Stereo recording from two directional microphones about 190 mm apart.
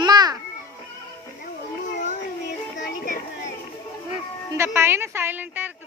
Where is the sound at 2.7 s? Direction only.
45° left (ahead or behind).